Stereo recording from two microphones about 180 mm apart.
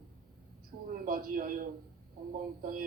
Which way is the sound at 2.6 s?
50° right (ahead or behind).